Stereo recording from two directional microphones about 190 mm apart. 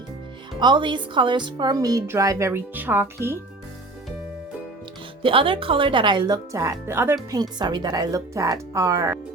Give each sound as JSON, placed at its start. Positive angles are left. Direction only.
{"t": 0.6, "sound": "speech", "side_deg": -25}
{"t": 5.2, "sound": "speech", "side_deg": -30}